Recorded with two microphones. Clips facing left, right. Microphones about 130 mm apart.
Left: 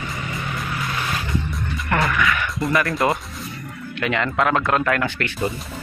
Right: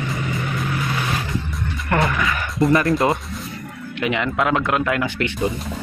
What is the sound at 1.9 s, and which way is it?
Music, 30° right (ahead or behind).